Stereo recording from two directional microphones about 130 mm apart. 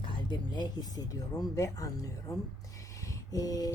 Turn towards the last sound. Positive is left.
turn(degrees=30)  # may be behind; listen again after turning